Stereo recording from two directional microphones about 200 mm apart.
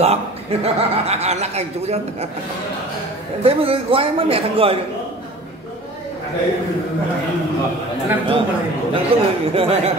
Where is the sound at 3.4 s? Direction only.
30° right (ahead or behind).